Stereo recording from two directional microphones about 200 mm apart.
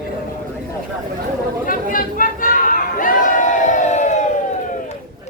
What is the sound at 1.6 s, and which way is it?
Chatter, 45° left (ahead or behind).